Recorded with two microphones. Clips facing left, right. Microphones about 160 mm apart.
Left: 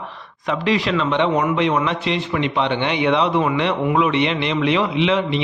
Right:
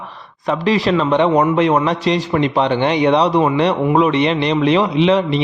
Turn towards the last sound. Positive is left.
turn(degrees=-40)  # may be behind; listen again after turning